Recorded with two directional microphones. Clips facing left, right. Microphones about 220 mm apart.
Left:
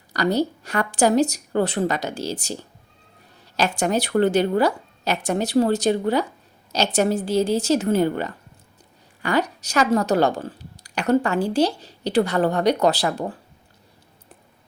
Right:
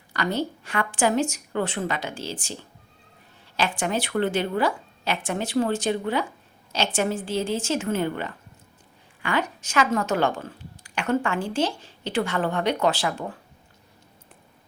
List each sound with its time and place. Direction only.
0.1 s a woman's voice: 40° left (ahead or behind)
3.6 s a woman's voice: 40° left (ahead or behind)